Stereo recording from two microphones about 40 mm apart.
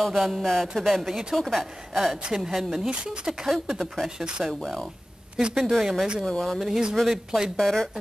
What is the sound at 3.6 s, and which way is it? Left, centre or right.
Speech, centre.